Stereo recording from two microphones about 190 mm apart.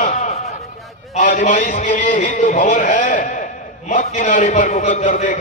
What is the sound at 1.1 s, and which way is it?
A man's voice, 40° left (ahead or behind).